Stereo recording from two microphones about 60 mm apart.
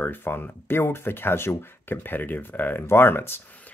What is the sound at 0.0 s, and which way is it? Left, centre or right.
Speech, left.